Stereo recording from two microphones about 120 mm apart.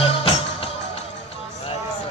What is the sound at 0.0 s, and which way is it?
Music, 50° left (ahead or behind).